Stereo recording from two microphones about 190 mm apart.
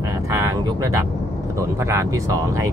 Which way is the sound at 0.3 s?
15° right (ahead or behind).